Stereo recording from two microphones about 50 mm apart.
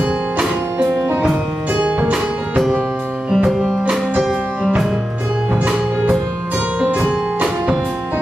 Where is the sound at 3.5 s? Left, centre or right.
Centre.